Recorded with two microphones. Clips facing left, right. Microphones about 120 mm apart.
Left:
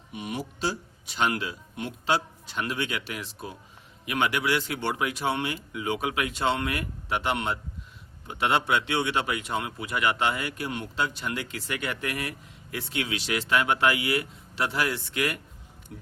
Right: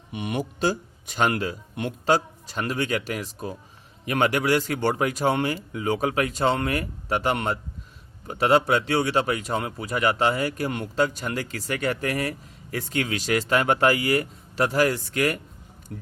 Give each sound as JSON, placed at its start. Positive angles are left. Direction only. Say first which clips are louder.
{"t": 0.1, "sound": "speech", "louder": "right 5 dB", "side_deg": -60}